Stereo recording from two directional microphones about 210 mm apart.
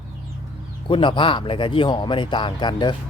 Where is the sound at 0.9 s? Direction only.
25° left (ahead or behind).